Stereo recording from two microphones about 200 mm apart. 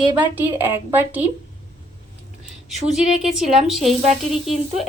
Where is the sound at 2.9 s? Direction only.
Centre (ahead or behind).